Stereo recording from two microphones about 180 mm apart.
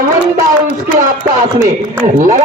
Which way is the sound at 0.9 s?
50° right (ahead or behind).